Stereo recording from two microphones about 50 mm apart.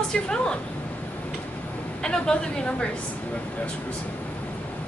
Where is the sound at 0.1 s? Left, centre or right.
Centre.